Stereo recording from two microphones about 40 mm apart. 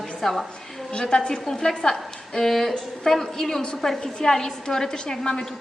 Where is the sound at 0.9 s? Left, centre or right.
Left.